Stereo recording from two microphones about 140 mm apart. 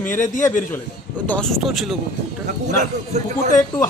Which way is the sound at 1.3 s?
5° left (ahead or behind).